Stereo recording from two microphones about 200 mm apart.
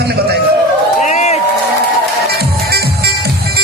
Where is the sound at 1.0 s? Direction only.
35° left (ahead or behind).